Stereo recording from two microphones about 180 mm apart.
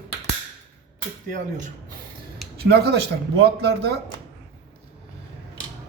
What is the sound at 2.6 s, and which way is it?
Speech, 60° right (ahead or behind).